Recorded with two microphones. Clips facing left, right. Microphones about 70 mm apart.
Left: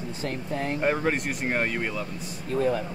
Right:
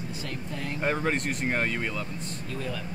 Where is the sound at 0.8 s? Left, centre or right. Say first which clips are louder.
Left 1 dB; centre.